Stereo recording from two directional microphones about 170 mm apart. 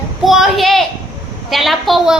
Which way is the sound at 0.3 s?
Centre (ahead or behind).